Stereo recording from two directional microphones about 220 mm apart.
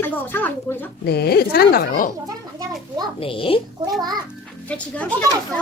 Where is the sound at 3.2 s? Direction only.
25° left (ahead or behind).